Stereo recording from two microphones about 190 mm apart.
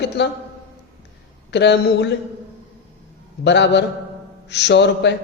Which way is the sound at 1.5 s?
65° left (ahead or behind).